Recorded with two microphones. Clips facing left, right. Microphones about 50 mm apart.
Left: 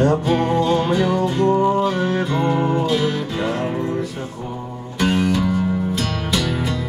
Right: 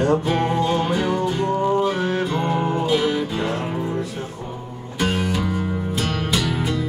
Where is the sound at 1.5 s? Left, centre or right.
Centre.